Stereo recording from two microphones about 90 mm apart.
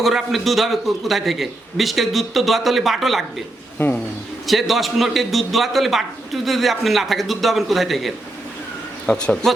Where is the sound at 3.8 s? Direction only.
20° left (ahead or behind).